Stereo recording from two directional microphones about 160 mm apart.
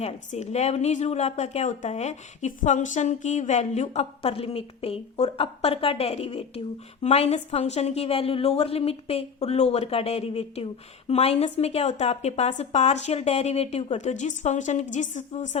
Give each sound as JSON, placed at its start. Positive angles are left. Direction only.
{"t": 0.0, "sound": "a woman's voice", "side_deg": 45}